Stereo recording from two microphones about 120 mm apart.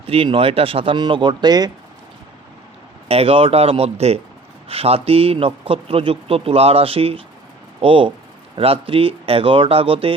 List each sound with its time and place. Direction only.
0.1 s a man's voice: 50° right (ahead or behind); by 1.7 s 35° right (ahead or behind)
3.1 s a man's voice: 55° right (ahead or behind)